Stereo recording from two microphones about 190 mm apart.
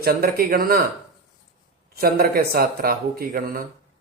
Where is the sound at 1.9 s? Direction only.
50° right (ahead or behind).